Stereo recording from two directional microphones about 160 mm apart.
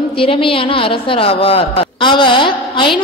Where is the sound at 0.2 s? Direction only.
35° left (ahead or behind).